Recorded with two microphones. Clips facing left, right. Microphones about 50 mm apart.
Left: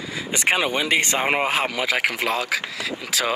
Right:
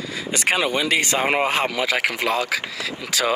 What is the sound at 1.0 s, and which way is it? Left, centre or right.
Speech, left.